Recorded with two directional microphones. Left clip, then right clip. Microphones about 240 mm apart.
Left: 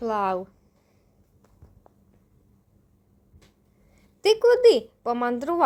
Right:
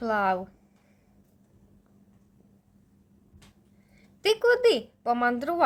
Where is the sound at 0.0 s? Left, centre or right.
Centre.